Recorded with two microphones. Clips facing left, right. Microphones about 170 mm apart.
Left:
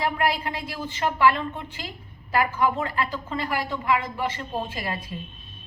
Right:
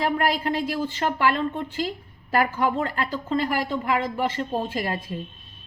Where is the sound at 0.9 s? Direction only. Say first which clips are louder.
Left 4 dB; 45° right (ahead or behind).